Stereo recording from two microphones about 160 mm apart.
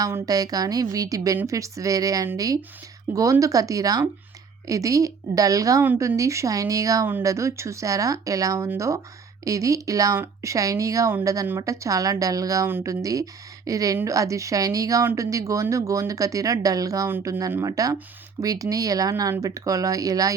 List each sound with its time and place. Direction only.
0.0 s speech: 25° right (ahead or behind)